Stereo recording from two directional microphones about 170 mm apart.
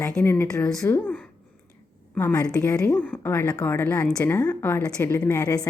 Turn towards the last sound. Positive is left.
turn(degrees=15)  # may be behind; listen again after turning